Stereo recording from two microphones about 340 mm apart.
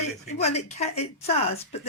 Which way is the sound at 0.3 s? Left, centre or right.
Centre.